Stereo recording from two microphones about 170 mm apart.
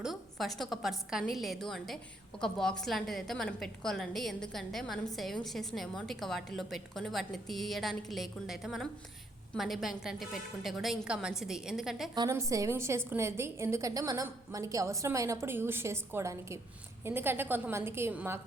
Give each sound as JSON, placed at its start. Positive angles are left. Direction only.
{"t": 0.0, "sound": "a woman's voice", "side_deg": 0}
{"t": 12.1, "sound": "a woman's voice", "side_deg": -20}